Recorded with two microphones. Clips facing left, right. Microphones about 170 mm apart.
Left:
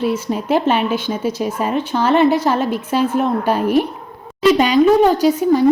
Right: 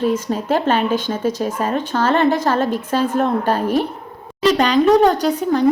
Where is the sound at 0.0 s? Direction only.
10° left (ahead or behind).